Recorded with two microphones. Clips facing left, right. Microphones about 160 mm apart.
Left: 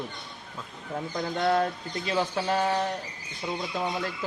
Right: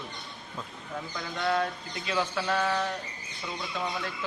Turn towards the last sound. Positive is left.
turn(degrees=35)  # may be behind; listen again after turning